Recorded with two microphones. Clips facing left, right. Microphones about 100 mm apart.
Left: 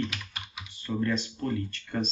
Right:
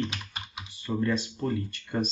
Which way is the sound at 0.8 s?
15° right (ahead or behind).